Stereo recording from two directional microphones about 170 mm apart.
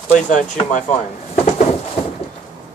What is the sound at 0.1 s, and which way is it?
Speech, 50° left (ahead or behind).